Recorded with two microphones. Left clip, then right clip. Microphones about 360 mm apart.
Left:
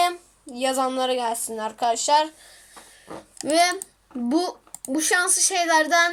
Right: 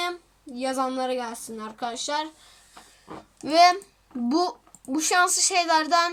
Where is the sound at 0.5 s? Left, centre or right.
Centre.